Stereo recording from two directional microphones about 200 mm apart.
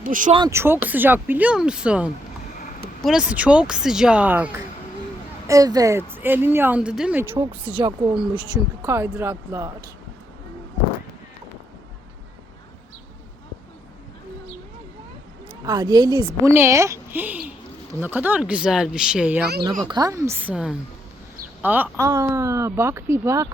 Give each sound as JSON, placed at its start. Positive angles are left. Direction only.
{"t": 0.0, "sound": "speech", "side_deg": -40}
{"t": 0.3, "sound": "speech", "side_deg": -15}
{"t": 7.3, "sound": "a woman's voice", "side_deg": -25}
{"t": 15.6, "sound": "a woman's voice", "side_deg": -20}
{"t": 19.8, "sound": "speech", "side_deg": -20}